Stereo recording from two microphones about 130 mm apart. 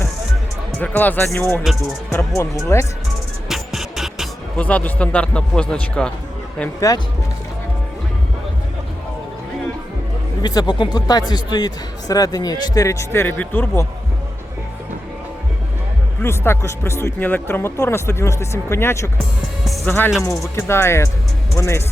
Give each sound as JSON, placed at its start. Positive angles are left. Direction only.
{"t": 0.8, "sound": "speech", "side_deg": 15}
{"t": 3.5, "sound": "music", "side_deg": -5}
{"t": 4.5, "sound": "speech", "side_deg": 10}
{"t": 6.7, "sound": "speech", "side_deg": 25}
{"t": 10.4, "sound": "speech", "side_deg": 30}
{"t": 16.2, "sound": "speech", "side_deg": 20}